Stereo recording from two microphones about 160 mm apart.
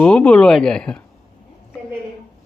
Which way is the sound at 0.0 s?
5° left (ahead or behind).